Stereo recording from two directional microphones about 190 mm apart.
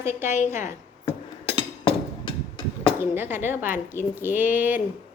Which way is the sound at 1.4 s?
30° left (ahead or behind).